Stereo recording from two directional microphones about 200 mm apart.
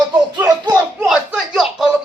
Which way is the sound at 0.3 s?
15° right (ahead or behind).